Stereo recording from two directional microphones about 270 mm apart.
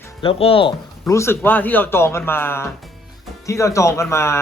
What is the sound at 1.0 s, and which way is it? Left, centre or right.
Speech, centre.